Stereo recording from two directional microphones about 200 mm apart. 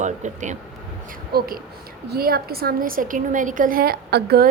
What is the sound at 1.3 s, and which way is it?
A woman's voice, 50° right (ahead or behind).